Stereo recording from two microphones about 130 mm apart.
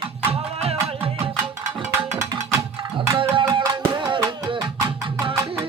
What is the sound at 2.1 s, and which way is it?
Music, 25° right (ahead or behind).